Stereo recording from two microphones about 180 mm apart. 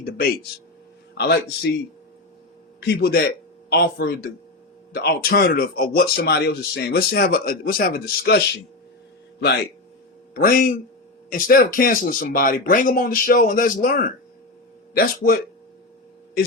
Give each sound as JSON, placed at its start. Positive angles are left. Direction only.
{"t": 0.0, "sound": "a man's voice", "side_deg": 55}
{"t": 2.8, "sound": "speech", "side_deg": 60}
{"t": 10.3, "sound": "speech", "side_deg": 50}